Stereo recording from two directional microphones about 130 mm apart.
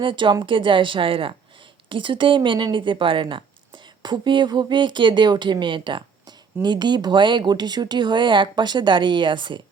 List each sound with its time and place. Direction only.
0.0 s speech: 40° right (ahead or behind)